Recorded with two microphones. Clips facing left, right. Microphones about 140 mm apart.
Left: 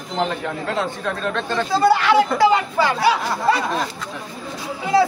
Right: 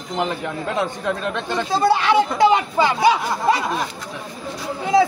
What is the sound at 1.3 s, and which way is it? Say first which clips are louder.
Speech: left 4 dB; 15° right (ahead or behind).